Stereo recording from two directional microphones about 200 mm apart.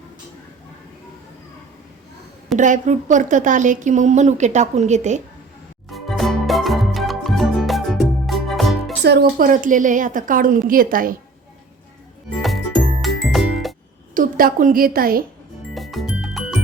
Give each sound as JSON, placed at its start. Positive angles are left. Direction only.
{"t": 2.6, "sound": "speech", "side_deg": -40}
{"t": 5.9, "sound": "music", "side_deg": 0}
{"t": 9.0, "sound": "a woman's voice", "side_deg": -50}
{"t": 12.4, "sound": "music", "side_deg": 0}
{"t": 14.1, "sound": "a woman's voice", "side_deg": -45}
{"t": 15.7, "sound": "music", "side_deg": 0}